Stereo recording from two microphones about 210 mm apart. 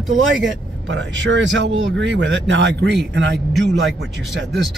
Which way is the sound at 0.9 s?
60° right (ahead or behind).